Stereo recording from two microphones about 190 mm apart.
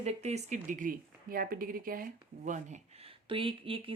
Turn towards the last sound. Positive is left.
turn(degrees=-30)  # may be behind; listen again after turning